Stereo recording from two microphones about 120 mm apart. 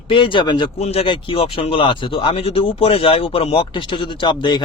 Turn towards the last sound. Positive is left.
turn(degrees=40)  # may be behind; listen again after turning